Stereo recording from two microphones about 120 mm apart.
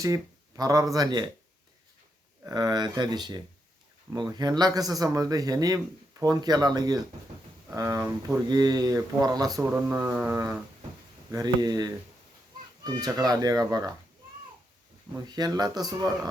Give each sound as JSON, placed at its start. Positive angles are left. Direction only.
{"t": 0.0, "sound": "speech", "side_deg": -30}
{"t": 2.5, "sound": "speech", "side_deg": -35}
{"t": 9.6, "sound": "speech", "side_deg": -15}
{"t": 10.3, "sound": "a sound", "side_deg": -25}
{"t": 11.3, "sound": "speech", "side_deg": -30}
{"t": 15.3, "sound": "speech", "side_deg": -35}